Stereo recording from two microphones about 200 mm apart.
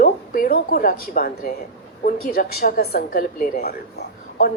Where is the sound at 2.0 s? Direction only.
45° left (ahead or behind).